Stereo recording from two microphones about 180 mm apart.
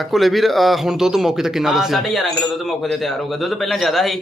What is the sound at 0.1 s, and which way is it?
A man's voice, centre (ahead or behind).